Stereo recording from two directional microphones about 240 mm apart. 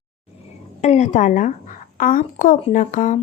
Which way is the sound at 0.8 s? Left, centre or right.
Left.